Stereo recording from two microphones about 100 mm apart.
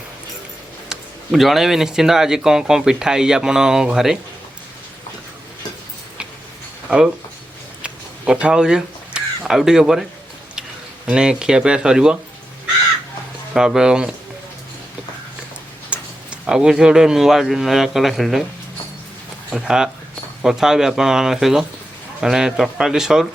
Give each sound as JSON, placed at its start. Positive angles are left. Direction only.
{"t": 0.9, "sound": "speech", "side_deg": 0}
{"t": 6.8, "sound": "speech", "side_deg": -5}
{"t": 7.8, "sound": "a sound", "side_deg": -10}
{"t": 11.1, "sound": "speech", "side_deg": -10}
{"t": 13.5, "sound": "speech", "side_deg": -5}
{"t": 15.9, "sound": "speech", "side_deg": -10}
{"t": 19.5, "sound": "speech", "side_deg": -5}